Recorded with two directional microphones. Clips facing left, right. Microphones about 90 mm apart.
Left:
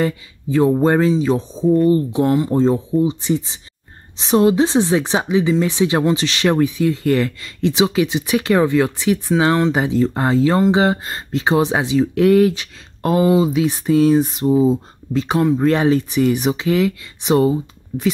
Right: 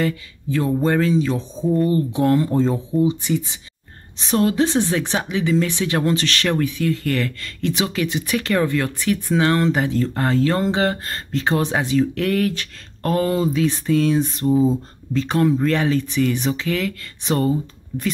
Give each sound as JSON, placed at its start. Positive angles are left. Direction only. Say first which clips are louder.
{"t": 0.0, "sound": "speech", "louder": "left 2 dB", "side_deg": 25}
{"t": 2.3, "sound": "speech", "louder": "left 1 dB", "side_deg": 15}
{"t": 2.6, "sound": "speech", "louder": "left 3 dB", "side_deg": 25}
{"t": 15.5, "sound": "speech", "louder": "left 4 dB", "side_deg": 25}